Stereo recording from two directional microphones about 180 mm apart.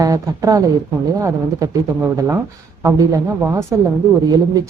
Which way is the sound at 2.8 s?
15° right (ahead or behind).